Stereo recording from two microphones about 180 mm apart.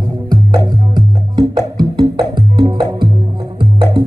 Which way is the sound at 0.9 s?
25° right (ahead or behind).